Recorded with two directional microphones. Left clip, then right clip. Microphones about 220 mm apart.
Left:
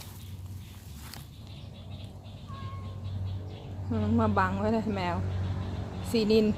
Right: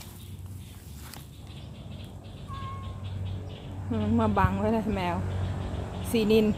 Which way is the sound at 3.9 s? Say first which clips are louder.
Right 1 dB; centre (ahead or behind).